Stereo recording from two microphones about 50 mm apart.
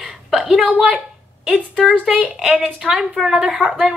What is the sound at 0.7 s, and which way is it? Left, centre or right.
Speech, right.